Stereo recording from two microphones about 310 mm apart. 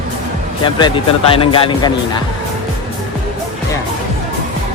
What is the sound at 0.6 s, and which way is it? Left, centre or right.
Speech, centre.